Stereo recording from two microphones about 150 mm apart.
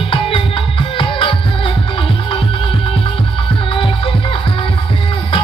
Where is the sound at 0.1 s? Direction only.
35° left (ahead or behind).